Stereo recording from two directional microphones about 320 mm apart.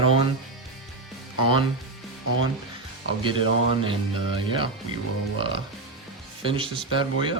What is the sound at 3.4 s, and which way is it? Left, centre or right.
Speech, left.